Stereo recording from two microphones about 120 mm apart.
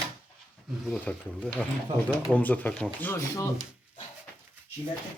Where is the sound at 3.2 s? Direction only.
25° left (ahead or behind).